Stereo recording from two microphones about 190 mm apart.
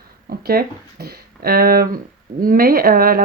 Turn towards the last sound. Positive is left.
turn(degrees=-50)  # may be behind; listen again after turning